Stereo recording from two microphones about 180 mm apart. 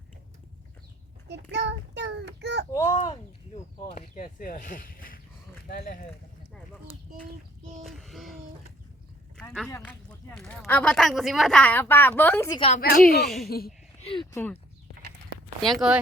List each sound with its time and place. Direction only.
1.3 s child singing: 70° right (ahead or behind)
2.7 s speech: 25° left (ahead or behind)
3.8 s speech: 40° left (ahead or behind)
7.9 s child singing: centre (ahead or behind)
9.4 s a sound: centre (ahead or behind)
9.6 s speech: 10° left (ahead or behind)
12.5 s speech: 30° left (ahead or behind)
12.8 s speech: 60° left (ahead or behind)
14.0 s speech: 30° left (ahead or behind)
14.3 s speech: 10° left (ahead or behind)
15.6 s speech: centre (ahead or behind)